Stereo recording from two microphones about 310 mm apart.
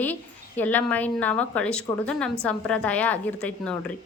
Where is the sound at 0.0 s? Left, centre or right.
Centre.